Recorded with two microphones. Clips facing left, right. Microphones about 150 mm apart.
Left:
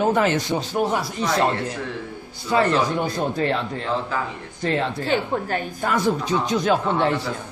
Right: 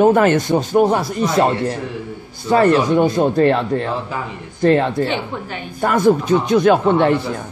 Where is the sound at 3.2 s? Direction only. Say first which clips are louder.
Right 8 dB; 55° right (ahead or behind).